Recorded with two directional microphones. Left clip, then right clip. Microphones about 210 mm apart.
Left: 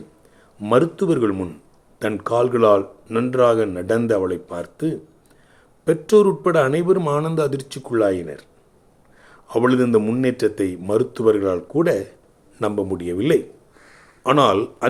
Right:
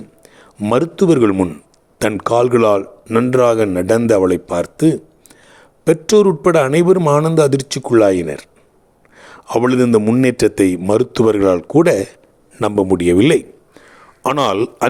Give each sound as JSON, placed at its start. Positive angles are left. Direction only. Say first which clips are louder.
{"t": 0.6, "sound": "speech", "louder": "right 3 dB", "side_deg": -35}